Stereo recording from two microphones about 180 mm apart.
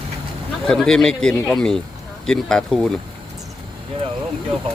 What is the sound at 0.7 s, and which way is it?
Speech, 5° left (ahead or behind).